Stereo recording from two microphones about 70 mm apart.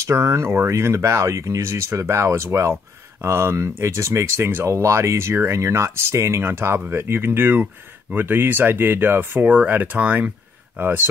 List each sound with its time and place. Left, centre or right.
0.0 s speech: right